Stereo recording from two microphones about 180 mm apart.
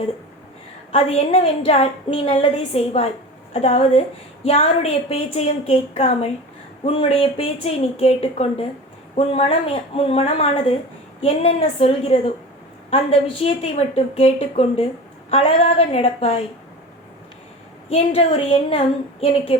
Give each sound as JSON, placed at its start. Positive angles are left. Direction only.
{"t": 0.9, "sound": "a woman's voice", "side_deg": 35}
{"t": 17.8, "sound": "a woman's voice", "side_deg": 35}